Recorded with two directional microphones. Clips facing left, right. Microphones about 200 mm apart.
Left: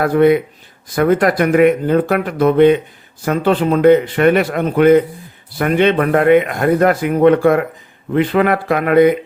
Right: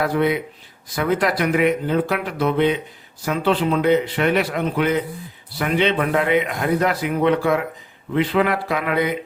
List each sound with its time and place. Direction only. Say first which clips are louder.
0.0 s speech: left 8 dB; 50° left (ahead or behind)